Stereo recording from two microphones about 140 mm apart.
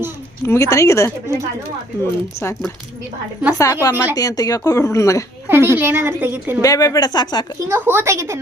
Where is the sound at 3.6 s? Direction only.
25° left (ahead or behind).